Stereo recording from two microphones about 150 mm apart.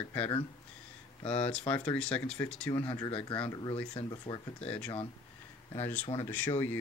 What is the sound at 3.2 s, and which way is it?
Speech, 40° left (ahead or behind).